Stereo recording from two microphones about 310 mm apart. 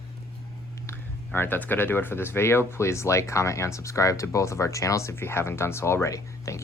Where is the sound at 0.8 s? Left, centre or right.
Centre.